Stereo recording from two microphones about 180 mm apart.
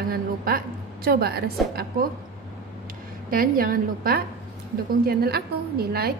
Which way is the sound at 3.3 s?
55° right (ahead or behind).